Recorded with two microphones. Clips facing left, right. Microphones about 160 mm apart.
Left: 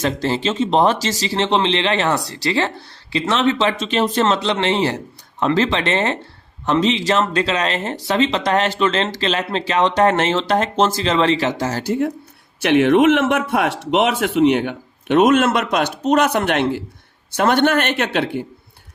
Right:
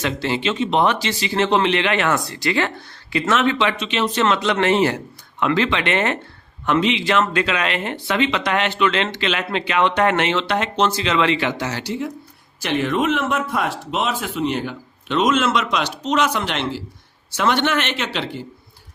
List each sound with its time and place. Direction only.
0.0 s speech: 40° left (ahead or behind)
4.5 s a man's voice: 25° left (ahead or behind); by 12.1 s 55° left (ahead or behind)
12.6 s a man's voice: 70° left (ahead or behind)